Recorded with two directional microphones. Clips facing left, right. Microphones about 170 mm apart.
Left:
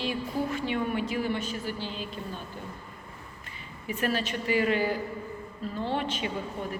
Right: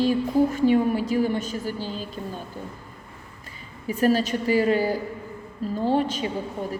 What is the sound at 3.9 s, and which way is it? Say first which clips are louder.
A woman's voice: right 8 dB; 40° right (ahead or behind).